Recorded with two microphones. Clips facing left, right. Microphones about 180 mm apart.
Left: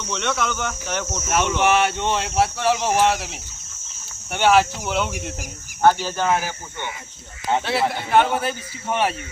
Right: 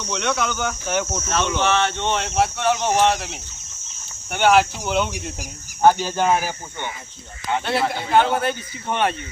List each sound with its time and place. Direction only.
0.0 s speech: centre (ahead or behind)
1.3 s speech: 10° left (ahead or behind)
5.8 s speech: 15° right (ahead or behind)
7.6 s speech: centre (ahead or behind)